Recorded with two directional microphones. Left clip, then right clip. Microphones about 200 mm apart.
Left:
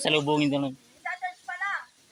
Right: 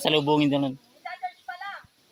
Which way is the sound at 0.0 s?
25° right (ahead or behind).